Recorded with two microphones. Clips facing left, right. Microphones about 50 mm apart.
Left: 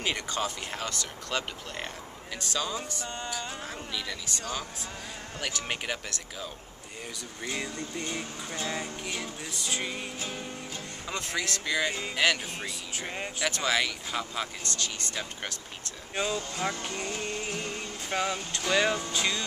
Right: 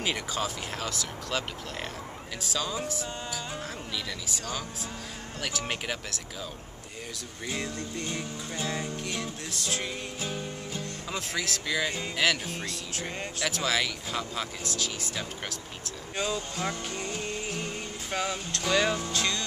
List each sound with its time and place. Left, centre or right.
0.0 s music: centre
7.4 s music: centre